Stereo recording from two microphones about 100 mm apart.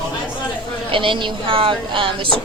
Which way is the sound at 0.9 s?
55° right (ahead or behind).